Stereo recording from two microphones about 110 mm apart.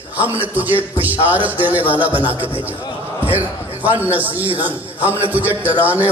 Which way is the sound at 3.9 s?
15° right (ahead or behind).